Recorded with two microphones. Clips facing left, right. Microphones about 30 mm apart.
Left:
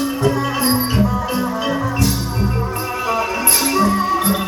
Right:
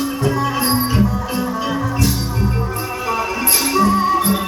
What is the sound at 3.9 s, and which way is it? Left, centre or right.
Music, centre.